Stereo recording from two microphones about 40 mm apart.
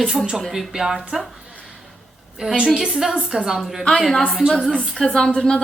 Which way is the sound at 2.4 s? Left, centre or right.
Right.